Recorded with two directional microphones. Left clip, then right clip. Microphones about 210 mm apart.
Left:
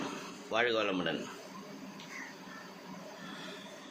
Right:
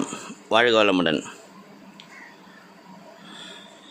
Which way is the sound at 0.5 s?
55° right (ahead or behind).